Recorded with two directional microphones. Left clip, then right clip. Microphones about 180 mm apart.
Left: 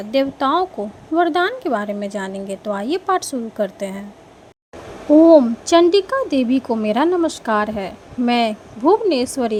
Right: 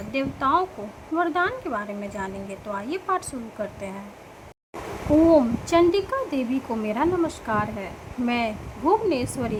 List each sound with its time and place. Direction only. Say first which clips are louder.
0.1 s a woman's voice: left 5 dB; 30° left (ahead or behind)
5.4 s a woman's voice: left 6 dB; 30° left (ahead or behind)